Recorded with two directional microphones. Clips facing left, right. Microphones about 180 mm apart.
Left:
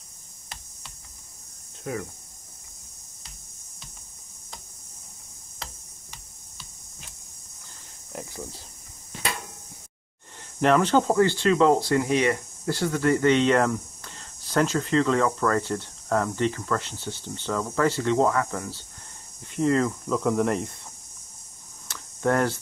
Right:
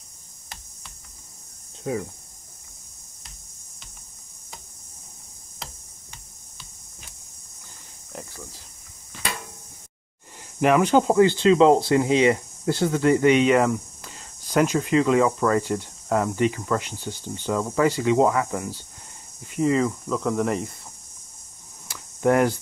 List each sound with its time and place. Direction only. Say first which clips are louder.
1.9 s speech: right 4 dB; 25° right (ahead or behind)
10.6 s speech: right 2 dB; 10° right (ahead or behind)
21.8 s cricket: right 4 dB; 10° right (ahead or behind)